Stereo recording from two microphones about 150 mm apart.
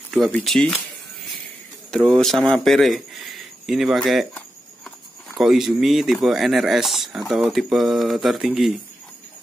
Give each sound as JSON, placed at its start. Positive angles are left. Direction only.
{"t": 0.3, "sound": "speech", "side_deg": 5}
{"t": 1.9, "sound": "speech", "side_deg": 5}
{"t": 4.3, "sound": "a sound", "side_deg": 10}
{"t": 5.4, "sound": "speech", "side_deg": 0}